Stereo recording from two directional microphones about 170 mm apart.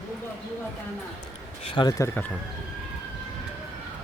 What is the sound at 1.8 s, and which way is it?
Speech, 20° left (ahead or behind).